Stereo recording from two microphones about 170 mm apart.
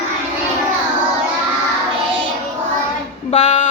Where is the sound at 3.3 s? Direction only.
45° left (ahead or behind).